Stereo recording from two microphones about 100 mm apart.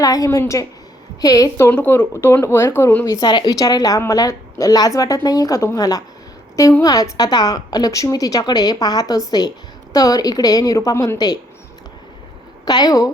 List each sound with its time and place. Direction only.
0.0 s a woman's voice: 35° left (ahead or behind)
1.7 s speech: 15° left (ahead or behind)
3.1 s a woman's voice: 45° left (ahead or behind)
12.6 s a woman's voice: 45° left (ahead or behind)